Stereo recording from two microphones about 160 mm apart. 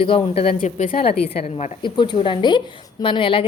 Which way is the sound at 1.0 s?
40° left (ahead or behind).